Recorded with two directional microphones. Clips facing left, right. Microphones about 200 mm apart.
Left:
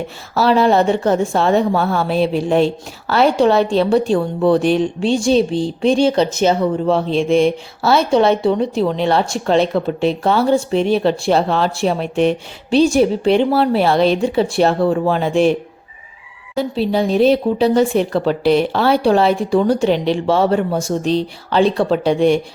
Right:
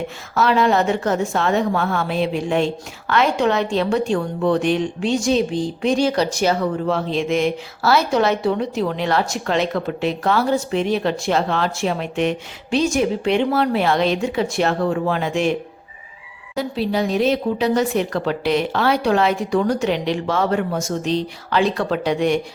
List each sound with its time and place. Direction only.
0.3 s speech: 35° left (ahead or behind)
16.6 s speech: 30° left (ahead or behind)